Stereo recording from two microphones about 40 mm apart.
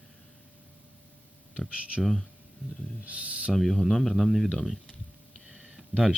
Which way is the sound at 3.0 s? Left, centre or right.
Right.